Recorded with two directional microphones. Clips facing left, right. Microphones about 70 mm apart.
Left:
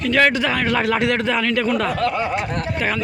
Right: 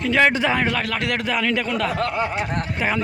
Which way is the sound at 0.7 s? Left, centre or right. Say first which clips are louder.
Left 5 dB; centre.